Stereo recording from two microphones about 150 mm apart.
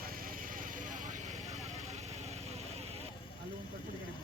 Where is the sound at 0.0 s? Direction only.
75° right (ahead or behind); by 3.0 s 45° right (ahead or behind).